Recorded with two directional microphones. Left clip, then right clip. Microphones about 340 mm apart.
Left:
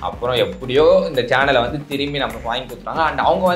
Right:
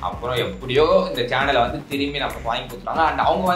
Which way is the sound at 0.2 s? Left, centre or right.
Left.